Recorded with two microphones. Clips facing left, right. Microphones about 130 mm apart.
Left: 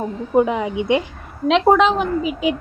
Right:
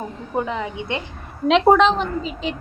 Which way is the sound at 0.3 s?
15° left (ahead or behind).